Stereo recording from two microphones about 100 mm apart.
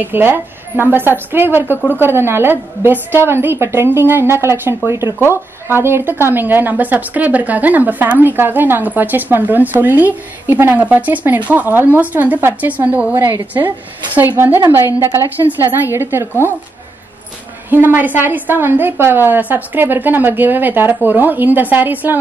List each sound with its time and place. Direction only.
0.0 s a woman's voice: 20° right (ahead or behind)
17.6 s a woman's voice: 20° right (ahead or behind)